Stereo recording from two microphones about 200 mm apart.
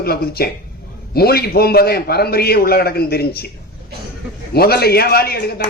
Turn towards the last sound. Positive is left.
turn(degrees=50)  # may be behind; listen again after turning